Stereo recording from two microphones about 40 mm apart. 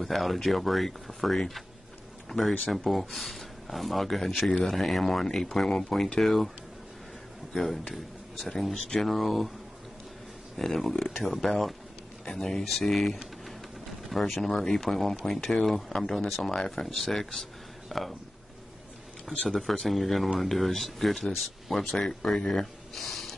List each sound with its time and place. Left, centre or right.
0.0 s speech: centre
2.2 s a sound: centre
2.9 s speech: centre
7.5 s a man's voice: centre
10.6 s speech: centre
11.0 s speech: centre
11.2 s speech: centre
17.8 s a sound: centre
19.5 s speech: centre
21.7 s speech: centre
22.9 s snort: centre